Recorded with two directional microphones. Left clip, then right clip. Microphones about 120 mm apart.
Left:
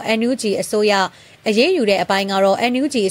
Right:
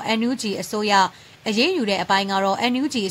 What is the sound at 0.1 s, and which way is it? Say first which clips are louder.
A woman's voice: left 6 dB; 25° left (ahead or behind).